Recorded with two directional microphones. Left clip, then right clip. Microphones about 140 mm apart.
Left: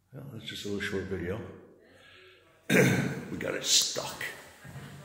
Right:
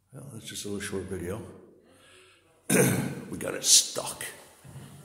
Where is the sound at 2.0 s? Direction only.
15° right (ahead or behind).